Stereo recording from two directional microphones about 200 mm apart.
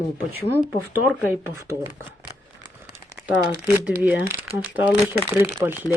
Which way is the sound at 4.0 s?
10° right (ahead or behind).